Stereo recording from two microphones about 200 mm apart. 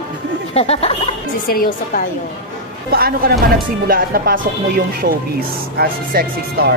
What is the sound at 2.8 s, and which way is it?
Speech, 50° right (ahead or behind).